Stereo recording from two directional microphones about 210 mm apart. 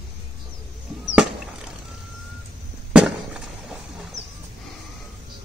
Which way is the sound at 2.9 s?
5° right (ahead or behind).